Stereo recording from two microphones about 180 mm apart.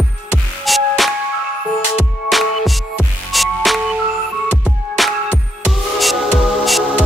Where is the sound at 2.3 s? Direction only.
Centre (ahead or behind).